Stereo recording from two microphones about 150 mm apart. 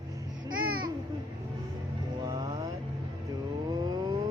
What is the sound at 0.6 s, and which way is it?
Babbling, 85° right.